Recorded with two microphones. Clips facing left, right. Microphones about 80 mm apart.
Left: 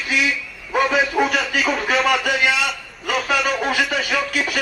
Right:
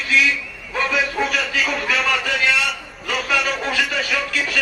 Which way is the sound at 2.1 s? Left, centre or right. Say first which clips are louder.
Left 2 dB; centre.